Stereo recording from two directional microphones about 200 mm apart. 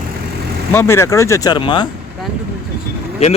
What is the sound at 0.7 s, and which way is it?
Speech, 10° left (ahead or behind).